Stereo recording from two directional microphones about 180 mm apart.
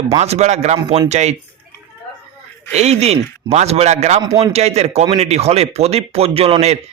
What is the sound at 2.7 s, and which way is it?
A man's voice, 35° right (ahead or behind).